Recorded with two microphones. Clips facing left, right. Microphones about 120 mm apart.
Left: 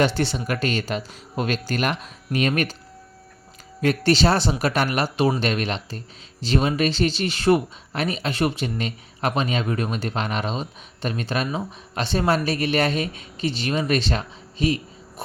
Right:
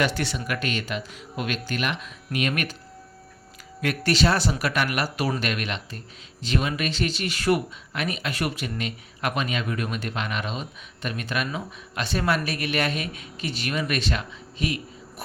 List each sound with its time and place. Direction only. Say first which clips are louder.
0.0 s speech: left 4 dB; 30° left (ahead or behind)
3.8 s speech: left 4 dB; 30° left (ahead or behind)